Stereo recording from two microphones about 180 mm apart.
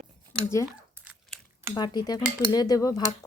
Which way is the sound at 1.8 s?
25° left (ahead or behind).